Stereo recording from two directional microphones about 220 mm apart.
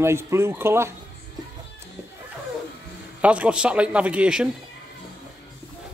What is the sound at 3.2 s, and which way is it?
A man's voice, 5° right (ahead or behind).